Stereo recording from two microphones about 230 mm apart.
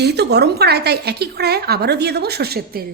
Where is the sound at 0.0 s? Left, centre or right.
Right.